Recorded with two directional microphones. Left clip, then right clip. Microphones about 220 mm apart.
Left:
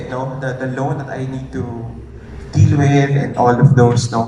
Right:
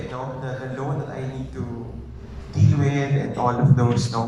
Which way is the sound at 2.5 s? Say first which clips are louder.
Left 9 dB; 45° left (ahead or behind).